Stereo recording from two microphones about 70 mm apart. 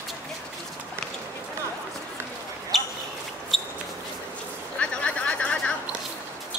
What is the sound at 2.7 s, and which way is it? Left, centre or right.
Basketball bounce, centre.